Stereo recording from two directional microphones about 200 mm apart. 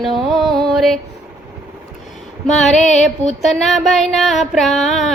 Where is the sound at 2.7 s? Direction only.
35° left (ahead or behind).